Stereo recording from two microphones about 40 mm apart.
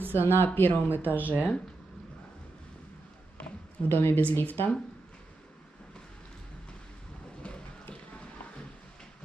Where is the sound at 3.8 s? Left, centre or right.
Left.